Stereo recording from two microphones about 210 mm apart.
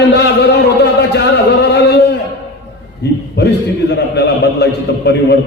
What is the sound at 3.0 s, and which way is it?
A man's voice, 55° left (ahead or behind).